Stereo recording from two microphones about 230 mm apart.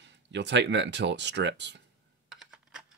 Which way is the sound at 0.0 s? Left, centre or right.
Right.